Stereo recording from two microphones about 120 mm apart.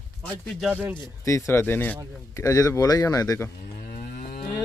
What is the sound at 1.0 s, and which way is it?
Speech, 25° left (ahead or behind).